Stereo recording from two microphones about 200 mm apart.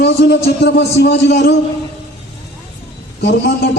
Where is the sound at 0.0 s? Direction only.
55° left (ahead or behind).